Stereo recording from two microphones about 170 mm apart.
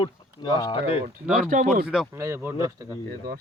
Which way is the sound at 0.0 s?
25° left (ahead or behind).